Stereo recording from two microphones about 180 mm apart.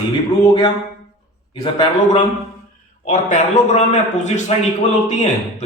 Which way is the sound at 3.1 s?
45° left (ahead or behind).